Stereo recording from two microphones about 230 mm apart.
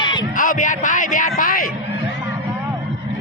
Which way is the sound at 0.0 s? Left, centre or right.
Centre.